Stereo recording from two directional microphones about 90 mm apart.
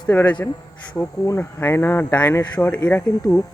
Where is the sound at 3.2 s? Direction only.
45° left (ahead or behind).